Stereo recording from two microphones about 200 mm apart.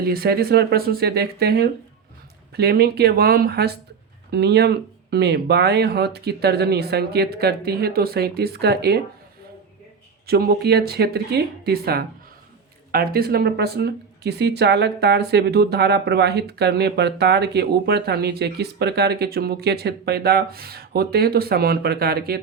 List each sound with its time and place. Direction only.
0.0 s speech: 50° right (ahead or behind)
10.2 s speech: 50° right (ahead or behind)